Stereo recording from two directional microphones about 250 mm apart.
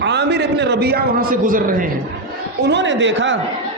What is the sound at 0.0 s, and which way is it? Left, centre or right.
A man's voice, right.